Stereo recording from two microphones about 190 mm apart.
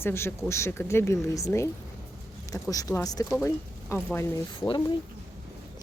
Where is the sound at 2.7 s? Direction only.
20° left (ahead or behind).